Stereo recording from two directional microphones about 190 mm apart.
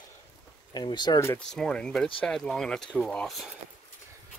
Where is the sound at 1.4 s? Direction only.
5° left (ahead or behind).